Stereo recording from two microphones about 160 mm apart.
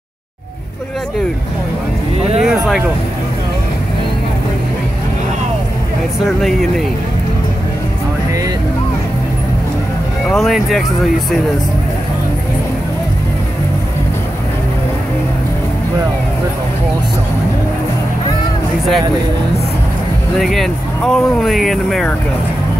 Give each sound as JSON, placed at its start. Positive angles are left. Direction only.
{"t": 2.4, "sound": "speech", "side_deg": -5}
{"t": 6.2, "sound": "speech", "side_deg": 0}
{"t": 10.2, "sound": "speech", "side_deg": 0}
{"t": 20.3, "sound": "speech", "side_deg": 0}